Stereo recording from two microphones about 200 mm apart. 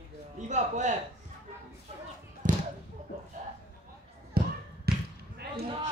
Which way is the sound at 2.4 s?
40° right (ahead or behind).